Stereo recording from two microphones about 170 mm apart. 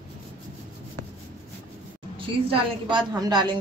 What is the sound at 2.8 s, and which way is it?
Speech, 25° right (ahead or behind).